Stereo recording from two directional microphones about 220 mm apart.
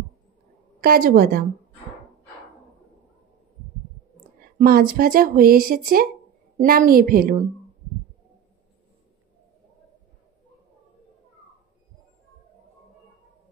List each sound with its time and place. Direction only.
0.7 s a woman's voice: 40° right (ahead or behind)
4.6 s speech: 40° right (ahead or behind)